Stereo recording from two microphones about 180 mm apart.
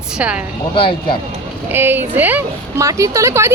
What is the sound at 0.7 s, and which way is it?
Speech, 30° left (ahead or behind).